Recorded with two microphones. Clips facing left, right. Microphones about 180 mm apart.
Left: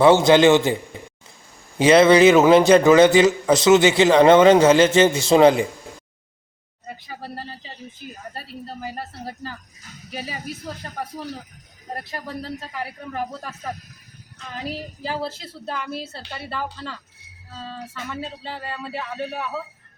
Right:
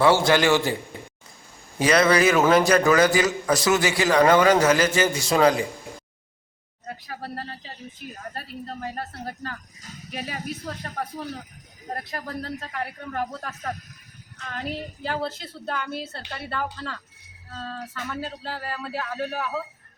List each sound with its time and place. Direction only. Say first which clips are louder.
0.0 s a man's voice: left 6 dB; 20° left (ahead or behind)
1.8 s a man's voice: left 6 dB; 25° left (ahead or behind)
6.8 s a woman's voice: even; centre (ahead or behind)